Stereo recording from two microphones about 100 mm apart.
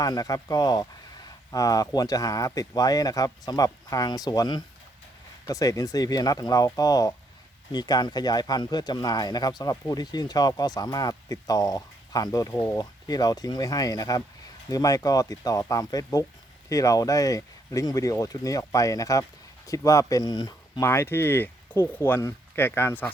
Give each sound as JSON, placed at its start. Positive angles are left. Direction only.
{"t": 0.0, "sound": "speech", "side_deg": 40}
{"t": 20.8, "sound": "speech", "side_deg": 25}